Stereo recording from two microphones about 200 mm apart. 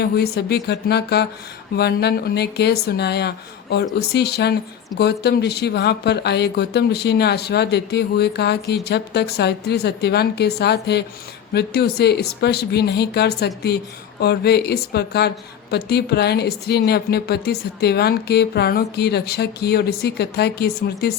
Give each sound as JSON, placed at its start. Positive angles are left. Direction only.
{"t": 0.0, "sound": "a woman's voice", "side_deg": 55}